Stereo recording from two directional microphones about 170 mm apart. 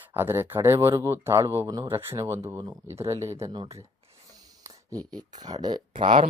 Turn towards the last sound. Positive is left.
turn(degrees=-30)  # may be behind; listen again after turning